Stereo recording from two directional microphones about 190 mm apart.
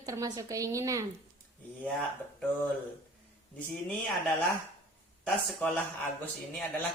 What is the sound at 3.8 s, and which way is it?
Speech, 5° left (ahead or behind).